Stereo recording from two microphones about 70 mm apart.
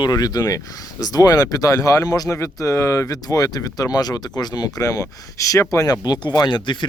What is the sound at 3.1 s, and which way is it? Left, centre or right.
Speech, left.